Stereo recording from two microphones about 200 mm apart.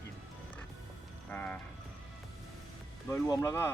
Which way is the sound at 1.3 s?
5° left (ahead or behind).